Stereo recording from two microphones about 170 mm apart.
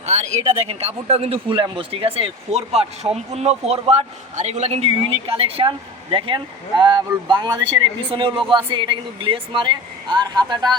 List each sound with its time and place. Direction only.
0.0 s a man's voice: 40° right (ahead or behind); by 10.8 s 25° right (ahead or behind)